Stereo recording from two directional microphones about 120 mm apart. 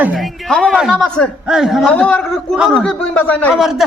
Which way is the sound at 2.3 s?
Centre (ahead or behind).